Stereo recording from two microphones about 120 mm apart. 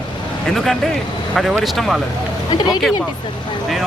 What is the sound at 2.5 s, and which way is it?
Speech, 35° left (ahead or behind).